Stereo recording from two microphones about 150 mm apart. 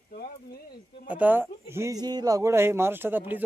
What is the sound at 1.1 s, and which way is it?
Speech, 10° right (ahead or behind).